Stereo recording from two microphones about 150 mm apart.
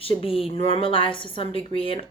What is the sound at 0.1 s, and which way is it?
A woman's voice, 40° left (ahead or behind).